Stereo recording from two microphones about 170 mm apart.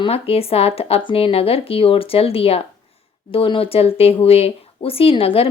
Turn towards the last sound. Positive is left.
turn(degrees=35)  # may be behind; listen again after turning